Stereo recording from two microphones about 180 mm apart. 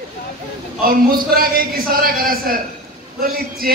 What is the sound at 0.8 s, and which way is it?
A man's voice, 55° right (ahead or behind).